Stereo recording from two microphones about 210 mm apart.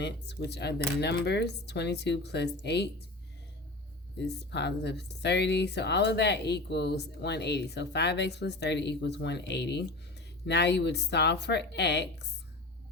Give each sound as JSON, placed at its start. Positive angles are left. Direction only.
{"t": 0.0, "sound": "speech", "side_deg": 55}
{"t": 4.2, "sound": "speech", "side_deg": 55}